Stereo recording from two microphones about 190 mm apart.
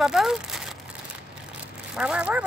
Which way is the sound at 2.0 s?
5° right (ahead or behind).